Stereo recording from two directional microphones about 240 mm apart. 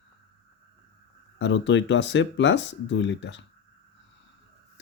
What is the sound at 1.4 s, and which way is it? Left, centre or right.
Speech, left.